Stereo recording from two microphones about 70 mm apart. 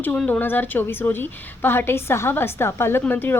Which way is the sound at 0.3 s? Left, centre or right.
Left.